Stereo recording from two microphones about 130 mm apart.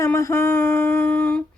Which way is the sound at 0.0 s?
20° left (ahead or behind).